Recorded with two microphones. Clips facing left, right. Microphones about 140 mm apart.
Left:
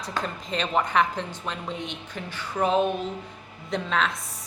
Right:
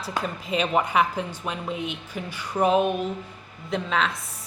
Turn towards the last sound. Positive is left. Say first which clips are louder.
# right 1 dB
turn(degrees=0)  # may be behind; listen again after turning